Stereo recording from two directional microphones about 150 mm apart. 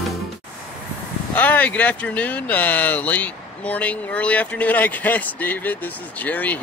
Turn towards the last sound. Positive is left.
turn(degrees=10)  # may be behind; listen again after turning